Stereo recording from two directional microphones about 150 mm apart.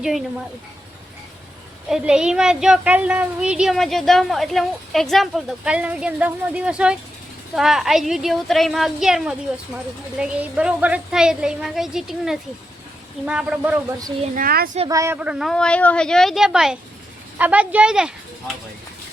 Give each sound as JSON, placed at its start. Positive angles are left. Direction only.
{"t": 0.0, "sound": "speech", "side_deg": 0}
{"t": 1.9, "sound": "speech", "side_deg": -5}
{"t": 14.3, "sound": "a woman's voice", "side_deg": -80}
{"t": 14.8, "sound": "speech", "side_deg": -20}